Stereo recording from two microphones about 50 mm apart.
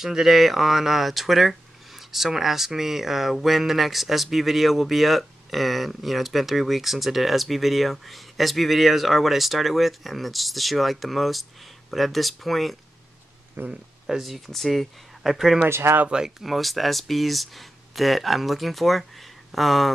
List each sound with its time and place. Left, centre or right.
0.0 s speech: centre
13.6 s speech: right
14.0 s speech: centre
15.6 s speech: right
16.3 s speech: centre